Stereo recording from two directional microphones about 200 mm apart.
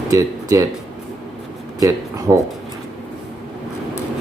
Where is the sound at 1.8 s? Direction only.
15° right (ahead or behind).